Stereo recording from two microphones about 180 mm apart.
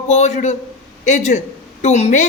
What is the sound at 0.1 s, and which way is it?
A man's voice, 40° left (ahead or behind).